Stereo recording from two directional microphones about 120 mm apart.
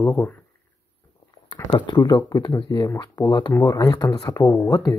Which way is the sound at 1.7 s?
40° left (ahead or behind).